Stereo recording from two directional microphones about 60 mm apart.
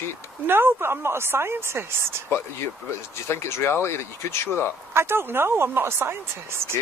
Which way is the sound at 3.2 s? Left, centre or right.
Left.